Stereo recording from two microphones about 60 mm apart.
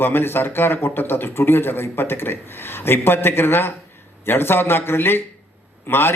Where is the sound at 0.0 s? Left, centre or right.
Left.